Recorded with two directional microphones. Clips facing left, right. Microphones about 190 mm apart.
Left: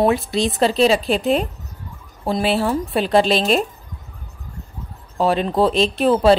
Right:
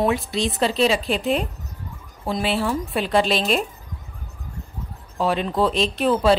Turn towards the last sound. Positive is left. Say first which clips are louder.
# left 4 dB
turn(degrees=35)  # may be behind; listen again after turning